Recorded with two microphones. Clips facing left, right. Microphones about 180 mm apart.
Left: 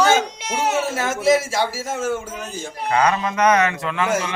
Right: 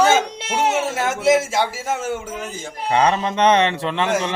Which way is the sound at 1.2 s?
20° right (ahead or behind).